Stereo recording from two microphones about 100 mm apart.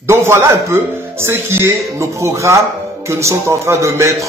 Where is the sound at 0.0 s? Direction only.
25° right (ahead or behind).